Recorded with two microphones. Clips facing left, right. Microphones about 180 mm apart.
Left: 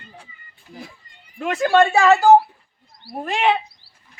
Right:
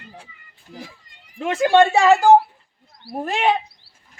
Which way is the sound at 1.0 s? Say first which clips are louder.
Left 2 dB; 90° right.